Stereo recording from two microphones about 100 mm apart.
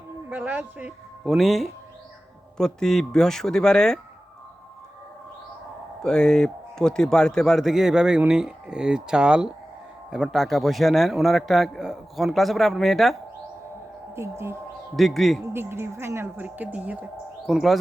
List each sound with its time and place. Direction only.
0.3 s a woman's voice: 20° right (ahead or behind)
1.2 s a man's voice: centre (ahead or behind)
6.0 s a man's voice: 5° left (ahead or behind)
14.2 s a woman's voice: 25° right (ahead or behind)
14.9 s a man's voice: centre (ahead or behind)
15.5 s a woman's voice: 25° right (ahead or behind)
17.4 s speech: centre (ahead or behind)